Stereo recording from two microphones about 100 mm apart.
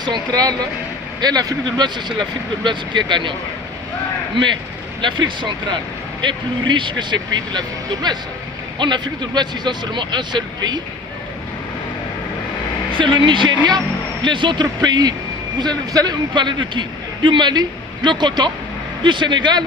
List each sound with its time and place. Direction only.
0.0 s a man's voice: 45° right (ahead or behind)
5.0 s a man's voice: 50° right (ahead or behind)
12.9 s a man's voice: 55° right (ahead or behind)